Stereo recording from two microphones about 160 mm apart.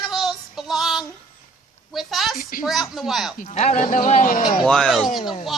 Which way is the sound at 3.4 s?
40° left (ahead or behind).